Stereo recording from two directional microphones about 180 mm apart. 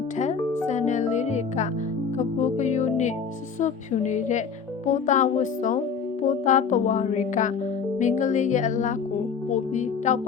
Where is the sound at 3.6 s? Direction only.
40° left (ahead or behind).